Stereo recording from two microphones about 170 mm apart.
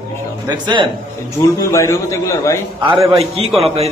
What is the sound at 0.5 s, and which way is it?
Speech, 25° right (ahead or behind).